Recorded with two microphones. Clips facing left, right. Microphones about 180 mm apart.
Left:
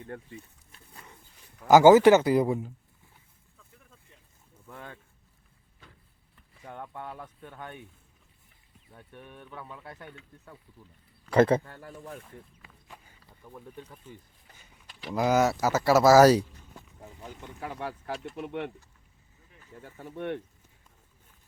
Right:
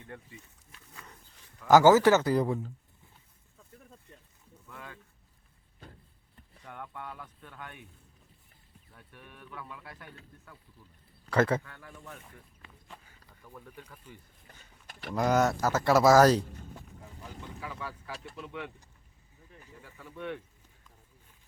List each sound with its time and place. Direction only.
1.6 s speech: 10° left (ahead or behind)
4.7 s a sound: 30° left (ahead or behind)
6.7 s speech: 30° left (ahead or behind)
8.9 s speech: 25° left (ahead or behind)
11.4 s speech: 35° left (ahead or behind)
13.4 s speech: 15° left (ahead or behind)
14.4 s vehicle: 50° right (ahead or behind)
15.1 s speech: 5° left (ahead or behind)
17.6 s speech: 60° left (ahead or behind)
19.8 s speech: 45° left (ahead or behind)